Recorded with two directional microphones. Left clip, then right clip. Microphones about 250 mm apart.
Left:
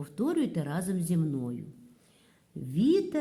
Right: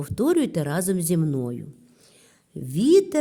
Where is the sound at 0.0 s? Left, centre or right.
Right.